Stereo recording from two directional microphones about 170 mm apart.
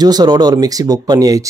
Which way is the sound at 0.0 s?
25° right (ahead or behind).